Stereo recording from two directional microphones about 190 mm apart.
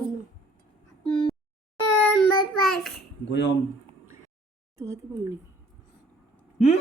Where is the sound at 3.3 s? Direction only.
65° left (ahead or behind).